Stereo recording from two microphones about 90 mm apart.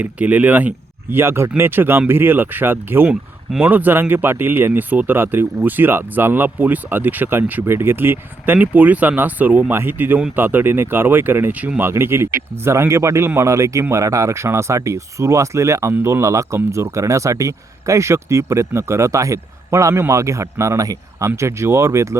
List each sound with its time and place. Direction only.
0.0 s speech: 15° right (ahead or behind)
1.1 s speech: 30° right (ahead or behind)